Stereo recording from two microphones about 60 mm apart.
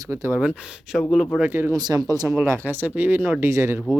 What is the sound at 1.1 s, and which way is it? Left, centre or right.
Speech, centre.